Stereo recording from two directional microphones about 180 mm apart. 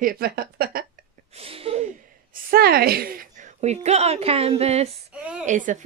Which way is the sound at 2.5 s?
60° right (ahead or behind).